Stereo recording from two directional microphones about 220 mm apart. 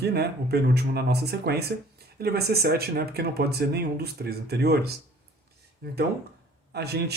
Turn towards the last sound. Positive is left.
turn(degrees=-50)  # may be behind; listen again after turning